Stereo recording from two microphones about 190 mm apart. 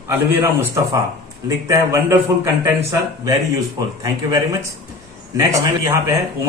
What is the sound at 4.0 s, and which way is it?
A man's voice, 15° right (ahead or behind).